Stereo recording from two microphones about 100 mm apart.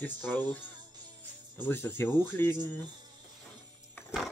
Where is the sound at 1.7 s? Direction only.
25° left (ahead or behind).